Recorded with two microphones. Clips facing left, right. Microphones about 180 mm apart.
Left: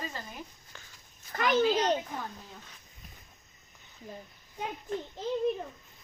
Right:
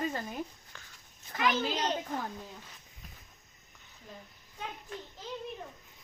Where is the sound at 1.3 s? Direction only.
50° left (ahead or behind).